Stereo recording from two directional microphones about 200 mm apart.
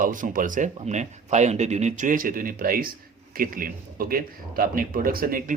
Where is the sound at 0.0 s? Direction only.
40° right (ahead or behind).